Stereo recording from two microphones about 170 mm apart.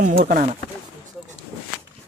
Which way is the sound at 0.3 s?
50° right (ahead or behind).